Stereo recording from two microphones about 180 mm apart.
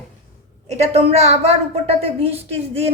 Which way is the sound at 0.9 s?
35° right (ahead or behind).